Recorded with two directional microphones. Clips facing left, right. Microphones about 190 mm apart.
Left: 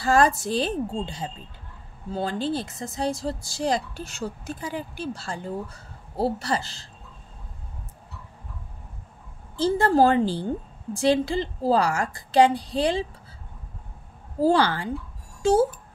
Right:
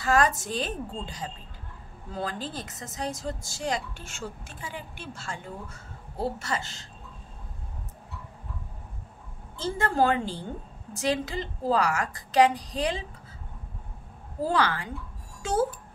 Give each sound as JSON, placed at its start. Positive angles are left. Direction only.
{"t": 0.0, "sound": "speech", "side_deg": 30}
{"t": 9.6, "sound": "speech", "side_deg": 35}
{"t": 14.4, "sound": "speech", "side_deg": 30}